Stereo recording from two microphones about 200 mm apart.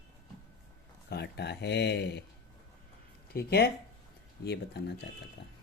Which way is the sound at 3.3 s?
50° left (ahead or behind).